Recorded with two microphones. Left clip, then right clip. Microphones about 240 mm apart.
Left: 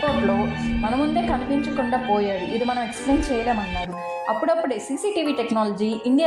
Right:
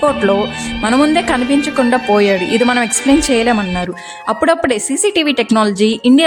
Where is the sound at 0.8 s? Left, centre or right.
Right.